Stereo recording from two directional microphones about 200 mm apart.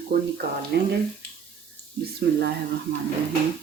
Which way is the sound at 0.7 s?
55° right (ahead or behind).